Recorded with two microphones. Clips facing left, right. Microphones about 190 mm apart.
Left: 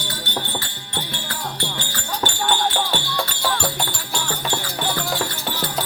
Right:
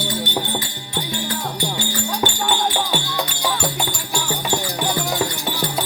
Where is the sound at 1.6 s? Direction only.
10° right (ahead or behind).